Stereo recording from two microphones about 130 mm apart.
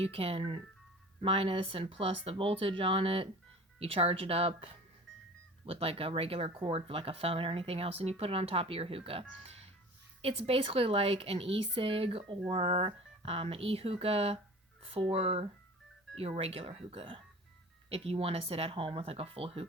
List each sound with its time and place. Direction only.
0.0 s speech: 45° right (ahead or behind)